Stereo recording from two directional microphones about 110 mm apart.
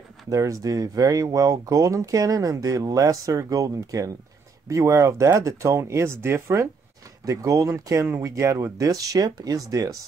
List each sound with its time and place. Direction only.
0.3 s speech: 30° right (ahead or behind)